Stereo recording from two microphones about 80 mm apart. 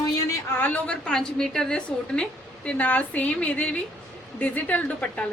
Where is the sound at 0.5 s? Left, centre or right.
Left.